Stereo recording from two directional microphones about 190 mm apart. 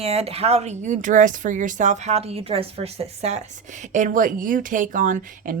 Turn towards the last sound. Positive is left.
turn(degrees=-45)  # may be behind; listen again after turning